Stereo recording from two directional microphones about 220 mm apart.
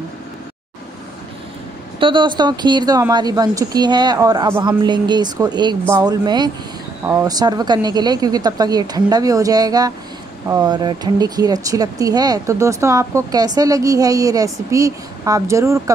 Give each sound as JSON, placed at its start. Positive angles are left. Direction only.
{"t": 2.0, "sound": "speech", "side_deg": -20}